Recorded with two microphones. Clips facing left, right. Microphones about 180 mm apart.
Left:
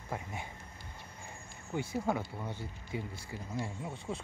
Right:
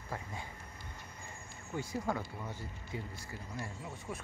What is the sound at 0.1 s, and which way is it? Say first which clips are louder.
Speech: left 3 dB; 20° left (ahead or behind).